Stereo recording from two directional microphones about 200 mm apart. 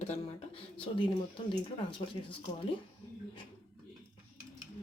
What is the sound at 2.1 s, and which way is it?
Speech, 25° left (ahead or behind).